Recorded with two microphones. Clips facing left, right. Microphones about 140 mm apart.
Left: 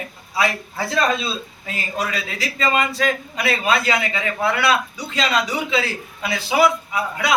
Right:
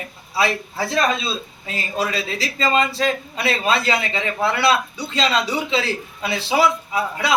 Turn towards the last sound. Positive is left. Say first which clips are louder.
# right 1 dB
turn(degrees=-30)  # may be behind; listen again after turning